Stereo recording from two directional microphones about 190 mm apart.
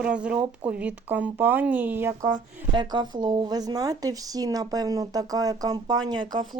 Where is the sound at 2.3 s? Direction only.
25° right (ahead or behind).